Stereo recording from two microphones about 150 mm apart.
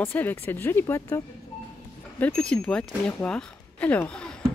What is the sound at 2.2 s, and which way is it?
Speech, 5° left (ahead or behind).